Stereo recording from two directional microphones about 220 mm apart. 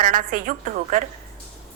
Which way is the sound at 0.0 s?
35° right (ahead or behind).